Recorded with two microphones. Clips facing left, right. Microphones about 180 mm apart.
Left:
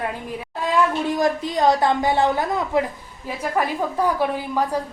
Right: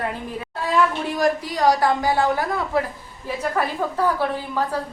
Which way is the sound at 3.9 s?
15° left (ahead or behind).